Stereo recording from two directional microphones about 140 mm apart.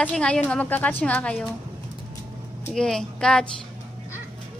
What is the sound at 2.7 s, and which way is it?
Speech, 5° left (ahead or behind).